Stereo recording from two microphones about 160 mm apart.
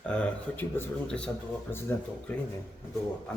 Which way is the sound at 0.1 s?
10° left (ahead or behind).